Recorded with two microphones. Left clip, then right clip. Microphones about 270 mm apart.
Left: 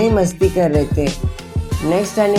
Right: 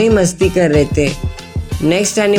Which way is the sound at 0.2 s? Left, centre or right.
Right.